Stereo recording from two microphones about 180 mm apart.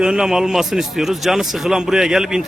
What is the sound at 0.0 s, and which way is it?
Speech, 5° right (ahead or behind).